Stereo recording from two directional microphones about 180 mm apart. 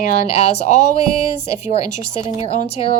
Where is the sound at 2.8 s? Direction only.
35° left (ahead or behind).